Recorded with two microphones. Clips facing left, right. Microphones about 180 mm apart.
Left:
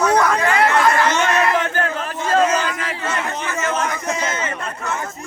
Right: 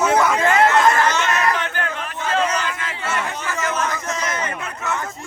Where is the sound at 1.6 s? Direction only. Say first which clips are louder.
Left 4 dB; 40° left (ahead or behind).